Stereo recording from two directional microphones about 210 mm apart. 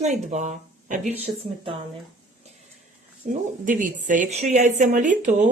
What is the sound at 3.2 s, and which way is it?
A woman's voice, 40° right (ahead or behind).